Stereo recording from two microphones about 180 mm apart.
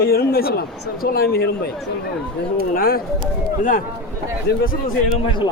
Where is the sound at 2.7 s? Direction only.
55° left (ahead or behind).